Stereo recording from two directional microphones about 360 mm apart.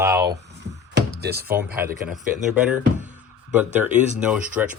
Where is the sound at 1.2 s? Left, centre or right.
Right.